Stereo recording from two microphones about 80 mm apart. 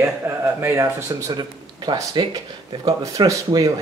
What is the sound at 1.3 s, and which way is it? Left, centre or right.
Speech, right.